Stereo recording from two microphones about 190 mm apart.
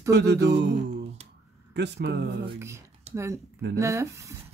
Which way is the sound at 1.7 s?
60° right (ahead or behind).